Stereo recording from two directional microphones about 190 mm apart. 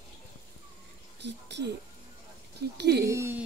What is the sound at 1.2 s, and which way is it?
Speech, 65° right (ahead or behind).